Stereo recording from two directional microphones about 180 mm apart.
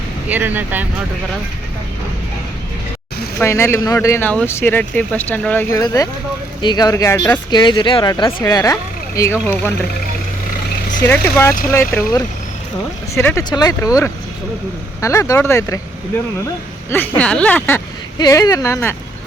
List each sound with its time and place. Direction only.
0.3 s speech: 10° right (ahead or behind)
3.3 s speech: 15° left (ahead or behind)
11.1 s speech: 10° left (ahead or behind)